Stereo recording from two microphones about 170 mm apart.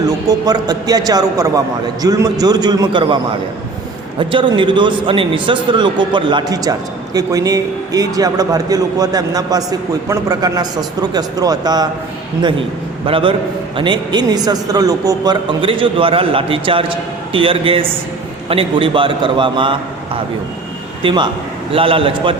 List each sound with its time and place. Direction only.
0.0 s a man's voice: 20° right (ahead or behind)
4.2 s a man's voice: 30° right (ahead or behind)
13.1 s a man's voice: 30° right (ahead or behind)
21.0 s a man's voice: 30° right (ahead or behind)